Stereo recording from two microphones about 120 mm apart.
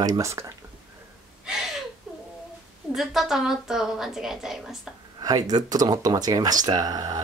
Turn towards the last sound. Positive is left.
turn(degrees=-35)  # may be behind; listen again after turning